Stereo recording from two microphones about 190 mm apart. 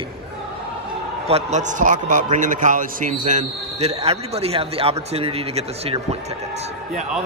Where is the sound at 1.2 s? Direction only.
35° right (ahead or behind).